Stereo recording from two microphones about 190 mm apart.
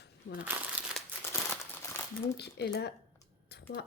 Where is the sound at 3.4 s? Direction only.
60° left (ahead or behind).